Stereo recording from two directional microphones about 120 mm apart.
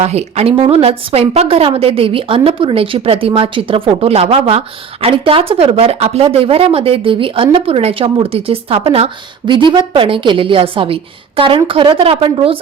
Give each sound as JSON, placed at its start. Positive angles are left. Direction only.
{"t": 0.0, "sound": "a woman's voice", "side_deg": -65}
{"t": 9.5, "sound": "a woman's voice", "side_deg": -40}